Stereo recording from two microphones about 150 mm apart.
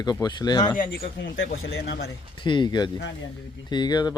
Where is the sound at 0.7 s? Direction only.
70° left (ahead or behind).